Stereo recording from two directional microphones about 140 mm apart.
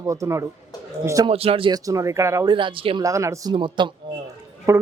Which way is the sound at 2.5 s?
35° right (ahead or behind).